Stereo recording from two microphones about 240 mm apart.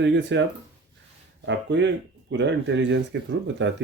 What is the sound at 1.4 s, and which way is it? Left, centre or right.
Speech, right.